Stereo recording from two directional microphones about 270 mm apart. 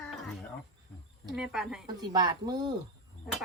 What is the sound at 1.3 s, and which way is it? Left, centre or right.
Speech, centre.